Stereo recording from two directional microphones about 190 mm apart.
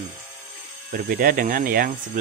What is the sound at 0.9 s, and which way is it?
Speech, 55° right (ahead or behind).